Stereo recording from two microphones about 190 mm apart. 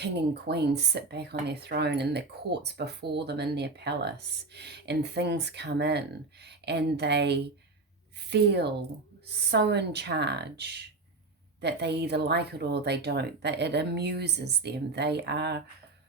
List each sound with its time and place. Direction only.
0.0 s speech: 60° right (ahead or behind)